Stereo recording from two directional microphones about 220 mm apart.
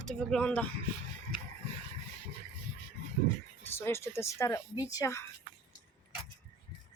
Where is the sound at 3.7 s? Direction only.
10° left (ahead or behind).